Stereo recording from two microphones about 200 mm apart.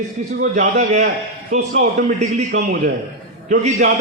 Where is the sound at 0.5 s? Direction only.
40° right (ahead or behind).